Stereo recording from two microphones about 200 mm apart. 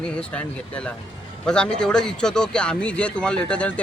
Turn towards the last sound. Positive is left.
turn(degrees=5)  # may be behind; listen again after turning